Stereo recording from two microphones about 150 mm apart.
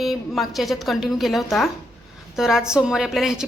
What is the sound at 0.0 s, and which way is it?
A woman's voice, centre (ahead or behind).